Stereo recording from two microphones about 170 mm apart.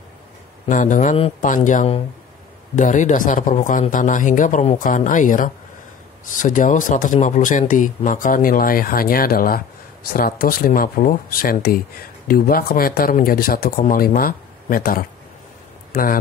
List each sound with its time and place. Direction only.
0.7 s speech: 50° left (ahead or behind)